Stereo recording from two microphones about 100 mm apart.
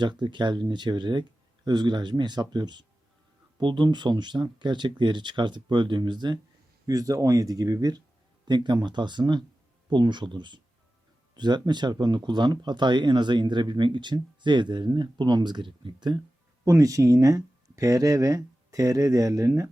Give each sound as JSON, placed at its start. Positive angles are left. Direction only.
{"t": 0.0, "sound": "speech", "side_deg": -50}
{"t": 6.8, "sound": "speech", "side_deg": -35}
{"t": 16.6, "sound": "speech", "side_deg": -35}